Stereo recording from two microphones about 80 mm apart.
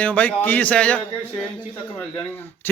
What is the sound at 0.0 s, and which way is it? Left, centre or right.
A man's voice, centre.